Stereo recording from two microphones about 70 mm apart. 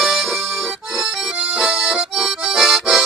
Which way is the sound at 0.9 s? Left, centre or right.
Centre.